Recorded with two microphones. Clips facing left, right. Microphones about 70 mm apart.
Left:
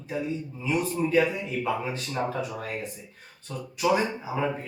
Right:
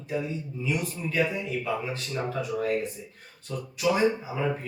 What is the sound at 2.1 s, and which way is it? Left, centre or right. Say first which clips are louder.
Speech: even; centre.